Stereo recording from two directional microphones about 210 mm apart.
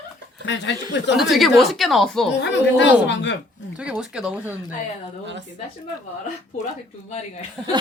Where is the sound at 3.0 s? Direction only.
60° left (ahead or behind).